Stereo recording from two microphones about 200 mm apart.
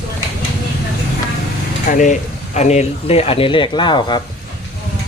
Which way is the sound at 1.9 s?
40° left (ahead or behind).